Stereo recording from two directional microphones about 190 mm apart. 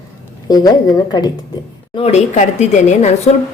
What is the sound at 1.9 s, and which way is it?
A woman's voice, 35° left (ahead or behind).